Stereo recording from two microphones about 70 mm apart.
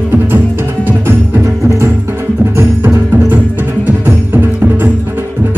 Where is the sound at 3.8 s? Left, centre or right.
Right.